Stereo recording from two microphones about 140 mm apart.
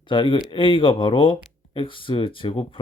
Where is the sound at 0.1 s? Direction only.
35° left (ahead or behind).